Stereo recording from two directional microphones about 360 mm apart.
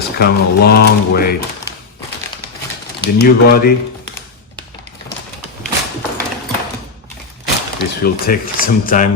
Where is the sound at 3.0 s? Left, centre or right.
Left.